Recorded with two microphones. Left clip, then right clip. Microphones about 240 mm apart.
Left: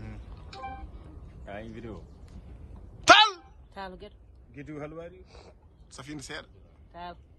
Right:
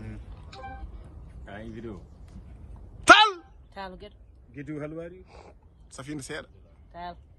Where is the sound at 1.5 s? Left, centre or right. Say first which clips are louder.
Even; left.